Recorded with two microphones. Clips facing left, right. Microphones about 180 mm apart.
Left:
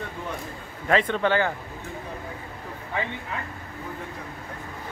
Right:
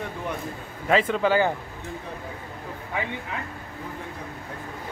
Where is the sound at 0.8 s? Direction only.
5° right (ahead or behind).